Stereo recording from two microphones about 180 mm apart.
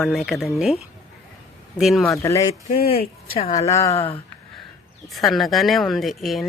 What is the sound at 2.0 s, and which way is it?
Speech, 15° left (ahead or behind).